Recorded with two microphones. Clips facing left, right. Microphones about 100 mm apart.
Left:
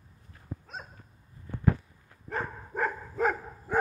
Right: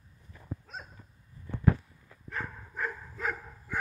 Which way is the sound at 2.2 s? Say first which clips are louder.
Left 4 dB; 40° left (ahead or behind).